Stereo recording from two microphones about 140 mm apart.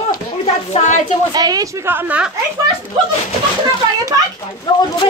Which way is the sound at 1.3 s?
30° right (ahead or behind).